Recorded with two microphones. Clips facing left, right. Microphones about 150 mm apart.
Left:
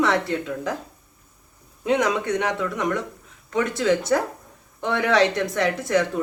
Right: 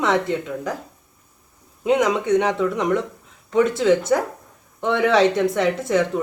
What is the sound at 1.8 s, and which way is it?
Speech, 10° right (ahead or behind).